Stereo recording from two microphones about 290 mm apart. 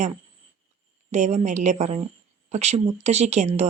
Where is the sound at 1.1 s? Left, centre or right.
Right.